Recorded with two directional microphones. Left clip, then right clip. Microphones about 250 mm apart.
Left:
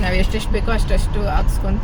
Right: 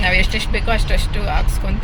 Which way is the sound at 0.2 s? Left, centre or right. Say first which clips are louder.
Right 3 dB; right.